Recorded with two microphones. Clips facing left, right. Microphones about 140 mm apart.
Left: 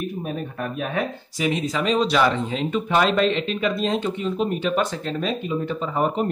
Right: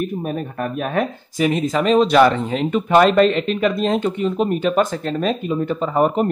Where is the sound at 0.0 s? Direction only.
50° right (ahead or behind).